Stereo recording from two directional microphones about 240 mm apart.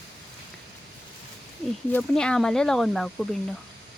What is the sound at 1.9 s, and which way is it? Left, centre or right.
Speech, centre.